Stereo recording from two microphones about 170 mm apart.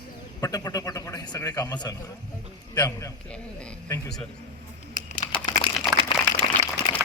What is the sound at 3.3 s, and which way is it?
Speech, 5° left (ahead or behind).